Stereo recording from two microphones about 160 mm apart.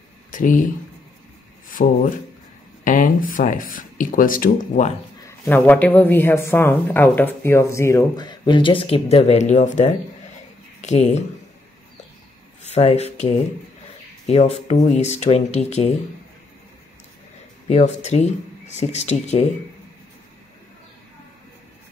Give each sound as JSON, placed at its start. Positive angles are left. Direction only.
{"t": 0.3, "sound": "speech", "side_deg": 55}
{"t": 1.7, "sound": "speech", "side_deg": 55}
{"t": 5.5, "sound": "speech", "side_deg": 10}
{"t": 12.6, "sound": "speech", "side_deg": 45}
{"t": 17.6, "sound": "speech", "side_deg": 45}